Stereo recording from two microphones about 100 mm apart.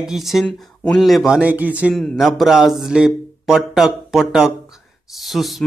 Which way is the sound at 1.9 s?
Centre (ahead or behind).